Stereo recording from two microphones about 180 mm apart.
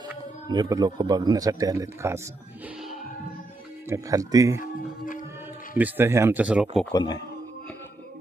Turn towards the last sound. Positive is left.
turn(degrees=25)  # may be behind; listen again after turning